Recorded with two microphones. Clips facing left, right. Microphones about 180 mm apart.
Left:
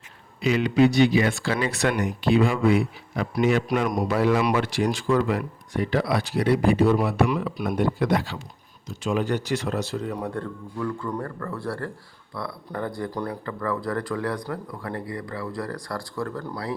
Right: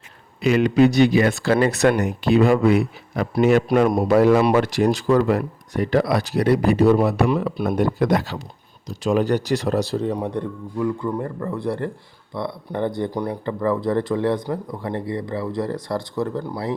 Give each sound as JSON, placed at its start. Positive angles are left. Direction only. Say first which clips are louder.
{"t": 0.4, "sound": "speech", "louder": "right 4 dB", "side_deg": -50}
{"t": 3.8, "sound": "speech", "louder": "right 7 dB", "side_deg": -30}
{"t": 4.1, "sound": "speech", "louder": "right 6 dB", "side_deg": -45}